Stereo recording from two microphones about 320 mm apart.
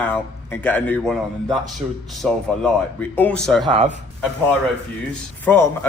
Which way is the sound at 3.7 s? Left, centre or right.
Centre.